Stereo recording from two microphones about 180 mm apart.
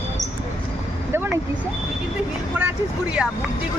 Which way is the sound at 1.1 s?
10° right (ahead or behind).